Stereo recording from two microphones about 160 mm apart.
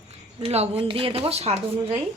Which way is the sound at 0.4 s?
40° right (ahead or behind).